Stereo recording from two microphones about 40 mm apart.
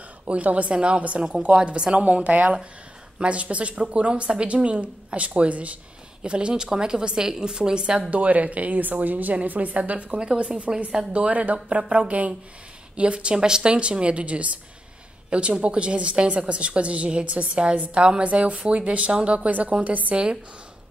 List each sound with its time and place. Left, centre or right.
0.3 s a woman's voice: right
8.1 s a woman's voice: right
11.1 s a woman's voice: right
12.9 s a woman's voice: right